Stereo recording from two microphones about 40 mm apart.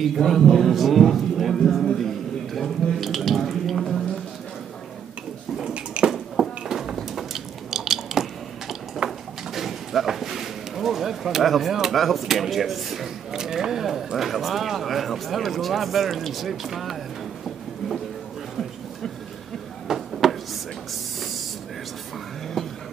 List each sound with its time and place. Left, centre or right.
0.2 s a man's voice: centre
6.0 s dishes: right
6.7 s a sound: centre
7.7 s squish: centre
9.5 s speech: centre
13.3 s speech: centre
19.9 s a sound: centre